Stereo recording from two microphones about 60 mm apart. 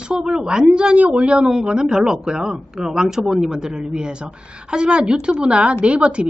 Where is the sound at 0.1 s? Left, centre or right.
Centre.